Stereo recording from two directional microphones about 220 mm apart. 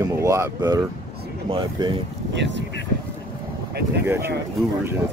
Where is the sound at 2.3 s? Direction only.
55° right (ahead or behind).